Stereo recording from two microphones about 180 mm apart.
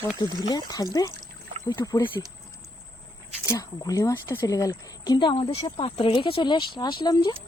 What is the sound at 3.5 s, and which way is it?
Speech, 20° left (ahead or behind).